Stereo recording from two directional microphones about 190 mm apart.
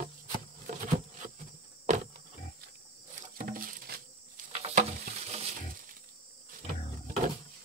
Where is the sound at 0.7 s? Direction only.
40° right (ahead or behind).